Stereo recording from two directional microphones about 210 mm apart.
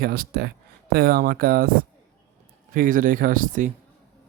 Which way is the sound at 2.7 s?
40° right (ahead or behind).